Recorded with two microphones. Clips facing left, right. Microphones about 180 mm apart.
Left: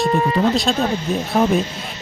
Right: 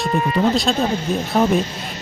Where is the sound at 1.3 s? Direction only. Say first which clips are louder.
Even; centre (ahead or behind).